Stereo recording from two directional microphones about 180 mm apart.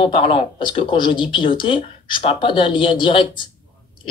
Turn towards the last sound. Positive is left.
turn(degrees=25)  # may be behind; listen again after turning